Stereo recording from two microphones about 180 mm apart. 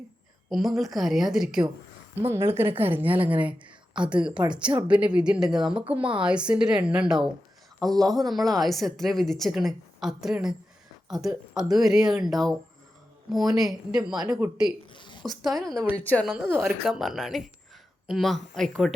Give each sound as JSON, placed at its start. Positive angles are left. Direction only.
{"t": 0.5, "sound": "a woman's voice", "side_deg": 0}
{"t": 14.9, "sound": "a sound", "side_deg": 25}
{"t": 15.4, "sound": "a woman's voice", "side_deg": 0}
{"t": 16.4, "sound": "a woman's voice", "side_deg": -10}